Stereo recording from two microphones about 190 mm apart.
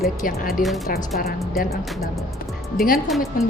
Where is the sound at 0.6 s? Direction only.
45° left (ahead or behind).